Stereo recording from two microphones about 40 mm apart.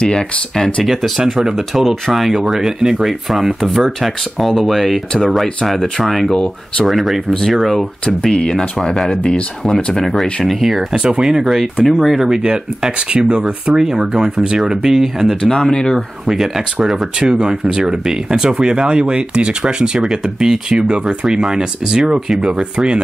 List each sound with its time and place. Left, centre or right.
0.0 s speech: left
0.8 s speech: centre
6.0 s speech: centre
8.0 s speech: centre
9.9 s speech: centre
11.8 s speech: centre
12.4 s speech: centre
15.5 s speech: centre
16.3 s speech: centre
17.2 s speech: centre